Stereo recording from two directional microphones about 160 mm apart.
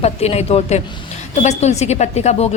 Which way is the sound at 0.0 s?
40° left (ahead or behind).